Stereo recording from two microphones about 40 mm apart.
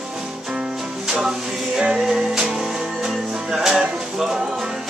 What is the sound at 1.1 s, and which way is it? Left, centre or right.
Music, centre.